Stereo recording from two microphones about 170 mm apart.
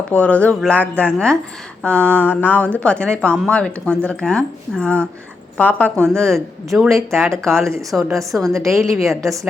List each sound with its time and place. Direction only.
0.1 s a woman's voice: 10° left (ahead or behind)
6.8 s speech: 15° right (ahead or behind)
7.2 s a woman's voice: 5° left (ahead or behind)
8.4 s speech: 20° right (ahead or behind)